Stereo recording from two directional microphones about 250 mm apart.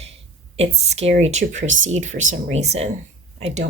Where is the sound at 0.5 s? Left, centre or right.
Right.